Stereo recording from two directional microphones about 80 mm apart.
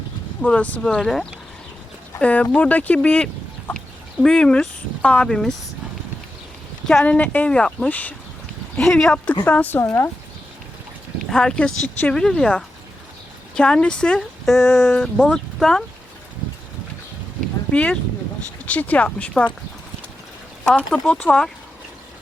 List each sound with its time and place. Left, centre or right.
0.4 s speech: centre
7.0 s speech: centre
8.8 s speech: centre
9.4 s speech: left
11.3 s speech: centre
17.7 s speech: centre
20.7 s speech: centre